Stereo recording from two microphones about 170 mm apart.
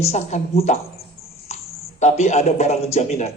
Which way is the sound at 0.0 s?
40° left (ahead or behind).